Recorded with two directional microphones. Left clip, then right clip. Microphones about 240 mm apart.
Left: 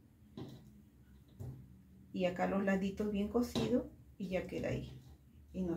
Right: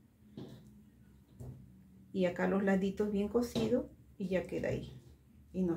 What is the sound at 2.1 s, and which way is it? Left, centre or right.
Speech, right.